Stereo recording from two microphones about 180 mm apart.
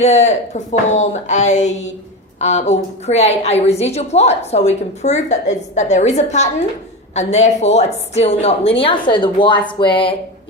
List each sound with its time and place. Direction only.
0.0 s a woman's voice: 40° left (ahead or behind)